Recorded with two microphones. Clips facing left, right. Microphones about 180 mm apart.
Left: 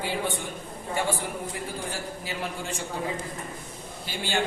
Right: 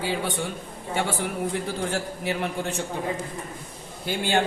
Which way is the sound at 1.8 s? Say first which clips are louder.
Right 6 dB; 65° right (ahead or behind).